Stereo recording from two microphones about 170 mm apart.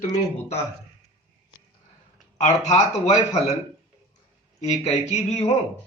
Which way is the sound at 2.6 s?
40° left (ahead or behind).